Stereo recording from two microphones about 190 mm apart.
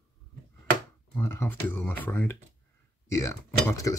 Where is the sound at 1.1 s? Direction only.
10° left (ahead or behind).